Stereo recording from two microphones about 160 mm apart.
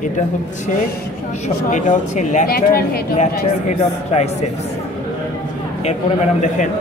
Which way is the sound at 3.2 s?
45° left (ahead or behind).